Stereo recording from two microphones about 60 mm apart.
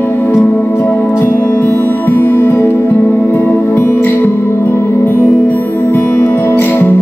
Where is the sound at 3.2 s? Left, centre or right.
Left.